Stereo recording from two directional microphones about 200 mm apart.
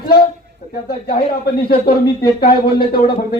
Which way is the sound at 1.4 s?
50° left (ahead or behind).